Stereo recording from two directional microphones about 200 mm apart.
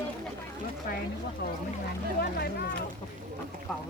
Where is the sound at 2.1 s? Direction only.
50° left (ahead or behind).